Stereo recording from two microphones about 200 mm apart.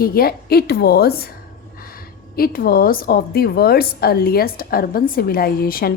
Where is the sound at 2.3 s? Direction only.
50° left (ahead or behind).